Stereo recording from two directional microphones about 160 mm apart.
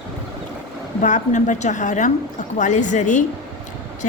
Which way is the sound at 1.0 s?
50° left (ahead or behind).